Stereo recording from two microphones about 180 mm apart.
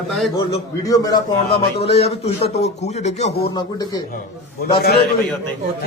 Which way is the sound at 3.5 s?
20° left (ahead or behind).